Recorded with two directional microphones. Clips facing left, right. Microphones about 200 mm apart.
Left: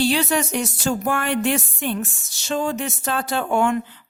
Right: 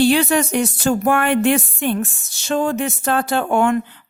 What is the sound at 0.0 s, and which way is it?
Speech, 55° right (ahead or behind).